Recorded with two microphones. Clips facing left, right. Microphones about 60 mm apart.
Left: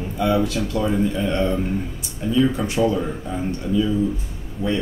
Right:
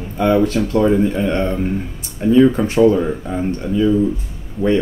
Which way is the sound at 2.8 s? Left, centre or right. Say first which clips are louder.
Right 8 dB; right.